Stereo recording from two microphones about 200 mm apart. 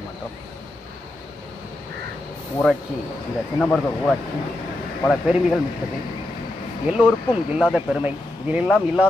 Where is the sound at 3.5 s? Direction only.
Centre (ahead or behind).